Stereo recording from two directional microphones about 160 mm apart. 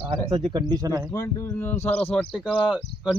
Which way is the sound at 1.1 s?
15° left (ahead or behind).